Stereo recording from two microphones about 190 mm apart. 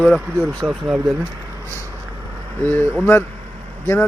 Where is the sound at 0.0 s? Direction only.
Centre (ahead or behind).